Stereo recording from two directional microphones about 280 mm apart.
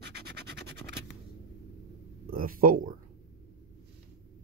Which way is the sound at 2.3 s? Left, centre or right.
Right.